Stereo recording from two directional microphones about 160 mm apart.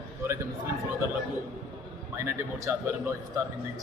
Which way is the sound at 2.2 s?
15° right (ahead or behind).